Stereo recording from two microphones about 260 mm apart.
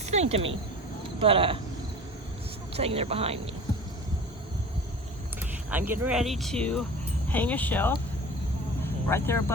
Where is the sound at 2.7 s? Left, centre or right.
Right.